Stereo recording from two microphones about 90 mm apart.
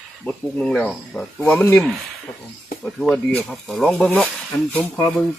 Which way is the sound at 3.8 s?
15° left (ahead or behind).